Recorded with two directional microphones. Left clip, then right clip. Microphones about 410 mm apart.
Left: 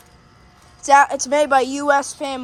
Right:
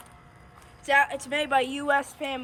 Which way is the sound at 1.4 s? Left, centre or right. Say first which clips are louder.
Left 7 dB; centre.